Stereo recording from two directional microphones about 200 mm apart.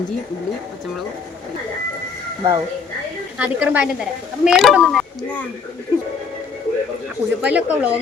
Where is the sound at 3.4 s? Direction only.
5° right (ahead or behind).